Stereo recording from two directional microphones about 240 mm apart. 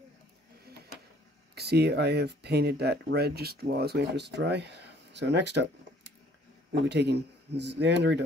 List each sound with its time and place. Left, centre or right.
1.5 s speech: right